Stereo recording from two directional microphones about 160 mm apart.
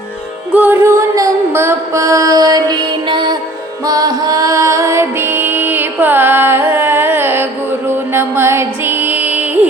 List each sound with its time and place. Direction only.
0.5 s music: 10° right (ahead or behind)